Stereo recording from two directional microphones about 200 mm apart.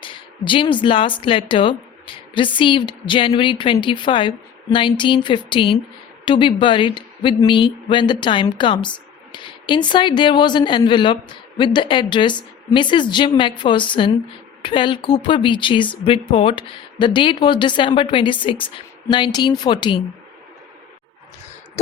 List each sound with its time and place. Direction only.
0.0 s speech: 25° left (ahead or behind)